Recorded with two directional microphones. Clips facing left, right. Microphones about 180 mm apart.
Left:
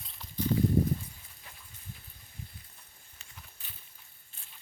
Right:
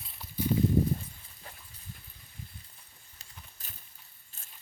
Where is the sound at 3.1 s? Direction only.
40° right (ahead or behind).